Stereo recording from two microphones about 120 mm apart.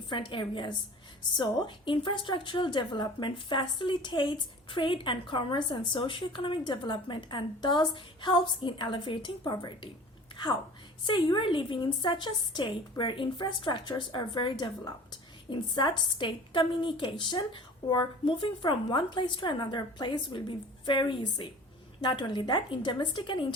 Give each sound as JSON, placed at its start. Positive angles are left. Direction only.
{"t": 0.1, "sound": "a woman's voice", "side_deg": 45}
{"t": 11.0, "sound": "a woman's voice", "side_deg": 45}